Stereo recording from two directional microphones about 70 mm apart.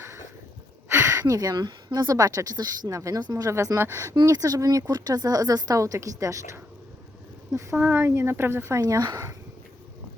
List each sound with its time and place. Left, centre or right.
0.0 s a sound: right
1.2 s speech: right
2.0 s speech: right
2.9 s speech: right
3.2 s speech: right
3.8 s speech: right
4.1 s speech: right
4.4 s speech: right
7.8 s speech: right
8.8 s speech: right